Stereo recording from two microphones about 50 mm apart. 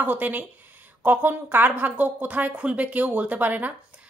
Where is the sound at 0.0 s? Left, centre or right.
Right.